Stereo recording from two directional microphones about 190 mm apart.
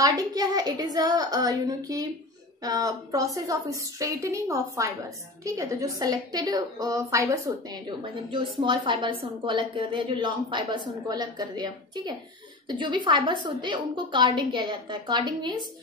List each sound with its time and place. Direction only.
0.0 s a woman's voice: 20° right (ahead or behind)